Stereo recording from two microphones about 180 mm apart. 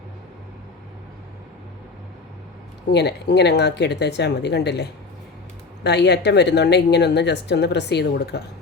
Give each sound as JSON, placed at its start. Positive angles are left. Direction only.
{"t": 2.9, "sound": "a woman's voice", "side_deg": 70}